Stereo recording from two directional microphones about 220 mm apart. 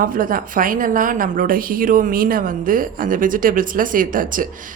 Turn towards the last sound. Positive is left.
turn(degrees=-40)  # may be behind; listen again after turning